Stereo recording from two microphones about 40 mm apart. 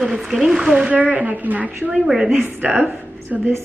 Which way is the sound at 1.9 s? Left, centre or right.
Centre.